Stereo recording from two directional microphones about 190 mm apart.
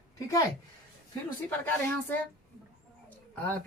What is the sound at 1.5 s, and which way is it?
Speech, 10° left (ahead or behind).